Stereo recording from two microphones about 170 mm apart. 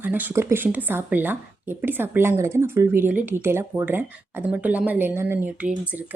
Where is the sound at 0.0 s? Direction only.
10° right (ahead or behind).